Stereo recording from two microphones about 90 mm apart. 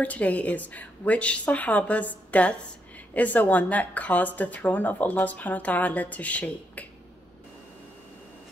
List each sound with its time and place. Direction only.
0.0 s speech: 15° left (ahead or behind)